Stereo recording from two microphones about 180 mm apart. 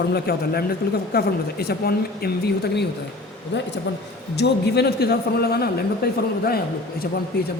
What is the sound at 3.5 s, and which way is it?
A man's voice, 75° left (ahead or behind).